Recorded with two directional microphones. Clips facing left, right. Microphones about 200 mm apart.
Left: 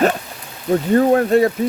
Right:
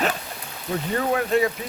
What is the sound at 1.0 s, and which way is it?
Speech, 40° left (ahead or behind).